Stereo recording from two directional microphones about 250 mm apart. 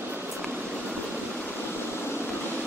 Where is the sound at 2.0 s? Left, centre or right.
Centre.